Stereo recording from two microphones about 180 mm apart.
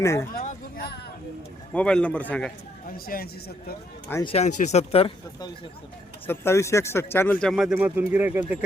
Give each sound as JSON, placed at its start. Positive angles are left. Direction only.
{"t": 0.0, "sound": "a man's voice", "side_deg": 15}
{"t": 0.3, "sound": "a sound", "side_deg": 60}
{"t": 1.7, "sound": "a man's voice", "side_deg": 5}
{"t": 2.9, "sound": "speech", "side_deg": 55}
{"t": 4.2, "sound": "speech", "side_deg": 35}
{"t": 6.2, "sound": "speech", "side_deg": 15}